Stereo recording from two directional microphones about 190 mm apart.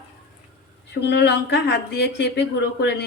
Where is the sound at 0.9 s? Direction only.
60° left (ahead or behind).